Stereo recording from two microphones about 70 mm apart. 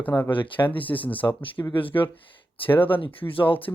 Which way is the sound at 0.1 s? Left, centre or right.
Left.